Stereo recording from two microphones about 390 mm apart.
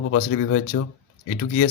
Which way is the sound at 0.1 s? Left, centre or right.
Left.